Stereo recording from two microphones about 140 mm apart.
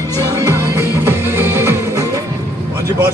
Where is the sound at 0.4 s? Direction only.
20° right (ahead or behind).